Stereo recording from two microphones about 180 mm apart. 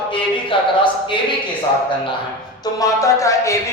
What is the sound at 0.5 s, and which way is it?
Speech, 30° left (ahead or behind).